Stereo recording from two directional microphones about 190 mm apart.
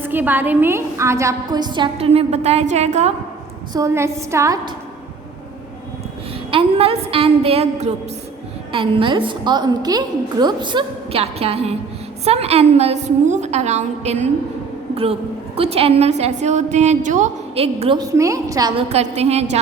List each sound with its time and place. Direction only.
0.0 s a woman's voice: 10° right (ahead or behind); by 3.1 s 35° right (ahead or behind)
3.7 s a woman's voice: 15° right (ahead or behind)
6.5 s a woman's voice: 30° right (ahead or behind)
15.5 s a woman's voice: 30° right (ahead or behind)
18.8 s a woman's voice: 35° right (ahead or behind)